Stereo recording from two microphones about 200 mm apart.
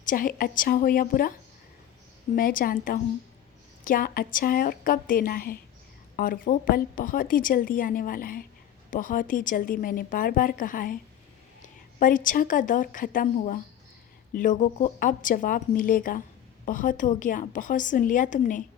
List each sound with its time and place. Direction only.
0.0 s a woman's voice: 45° left (ahead or behind)
2.3 s a woman's voice: 45° left (ahead or behind)